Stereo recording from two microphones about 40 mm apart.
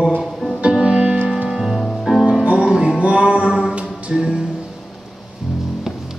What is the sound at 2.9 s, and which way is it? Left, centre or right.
Music, right.